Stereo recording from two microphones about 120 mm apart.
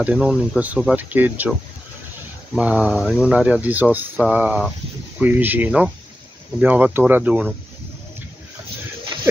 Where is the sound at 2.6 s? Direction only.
10° right (ahead or behind).